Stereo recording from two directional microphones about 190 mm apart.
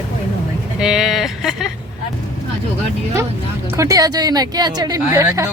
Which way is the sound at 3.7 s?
15° right (ahead or behind).